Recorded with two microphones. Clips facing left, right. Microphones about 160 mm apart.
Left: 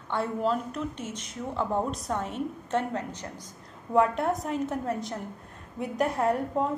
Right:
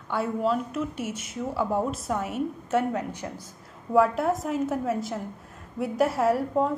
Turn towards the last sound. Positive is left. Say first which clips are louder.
# right 3 dB
turn(degrees=-5)  # may be behind; listen again after turning